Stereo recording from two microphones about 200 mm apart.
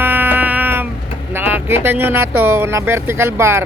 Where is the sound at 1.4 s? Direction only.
10° right (ahead or behind).